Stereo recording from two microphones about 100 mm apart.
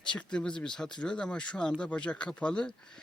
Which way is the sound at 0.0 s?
10° left (ahead or behind).